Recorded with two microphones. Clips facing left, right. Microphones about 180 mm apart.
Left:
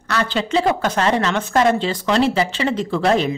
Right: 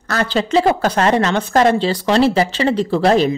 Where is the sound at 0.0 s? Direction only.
40° right (ahead or behind).